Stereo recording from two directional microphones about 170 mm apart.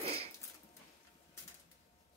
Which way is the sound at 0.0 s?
35° right (ahead or behind).